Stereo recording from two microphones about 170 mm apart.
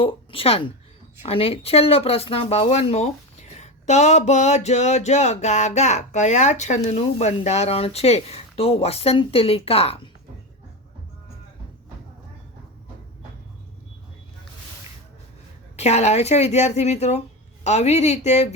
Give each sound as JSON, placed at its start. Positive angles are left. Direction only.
{"t": 0.0, "sound": "speech", "side_deg": 30}
{"t": 15.7, "sound": "speech", "side_deg": 40}